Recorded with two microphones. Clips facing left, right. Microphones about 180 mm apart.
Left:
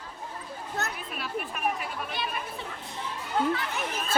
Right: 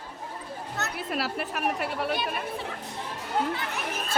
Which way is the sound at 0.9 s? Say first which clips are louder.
Right 4 dB; 85° right.